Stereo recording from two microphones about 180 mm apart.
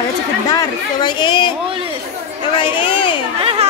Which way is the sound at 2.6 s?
25° left (ahead or behind).